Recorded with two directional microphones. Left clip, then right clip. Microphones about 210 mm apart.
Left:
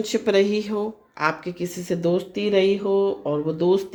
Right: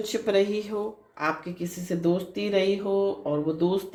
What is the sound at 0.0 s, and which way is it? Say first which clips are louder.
Speech: left 4 dB; 50° left (ahead or behind).